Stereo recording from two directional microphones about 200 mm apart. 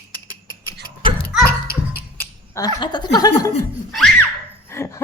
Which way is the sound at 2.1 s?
20° left (ahead or behind).